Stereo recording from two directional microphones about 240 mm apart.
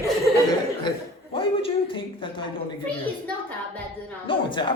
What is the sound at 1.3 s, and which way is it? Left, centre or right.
A man's voice, left.